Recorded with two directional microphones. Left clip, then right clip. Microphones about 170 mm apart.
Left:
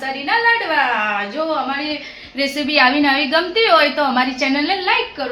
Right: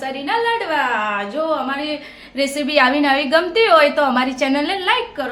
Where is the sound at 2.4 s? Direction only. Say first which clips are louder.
Even; 25° right (ahead or behind).